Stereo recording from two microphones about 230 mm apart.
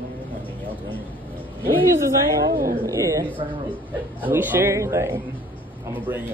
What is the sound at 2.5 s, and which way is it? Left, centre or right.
Speech, right.